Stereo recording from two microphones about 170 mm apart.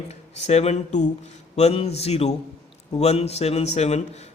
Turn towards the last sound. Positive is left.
turn(degrees=40)  # may be behind; listen again after turning